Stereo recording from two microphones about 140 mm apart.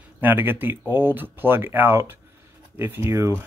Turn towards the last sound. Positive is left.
turn(degrees=-20)  # may be behind; listen again after turning